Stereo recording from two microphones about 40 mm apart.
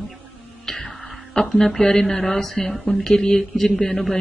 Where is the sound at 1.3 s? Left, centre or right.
Centre.